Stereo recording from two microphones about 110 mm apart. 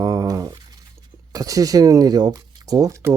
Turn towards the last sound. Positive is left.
turn(degrees=-25)  # may be behind; listen again after turning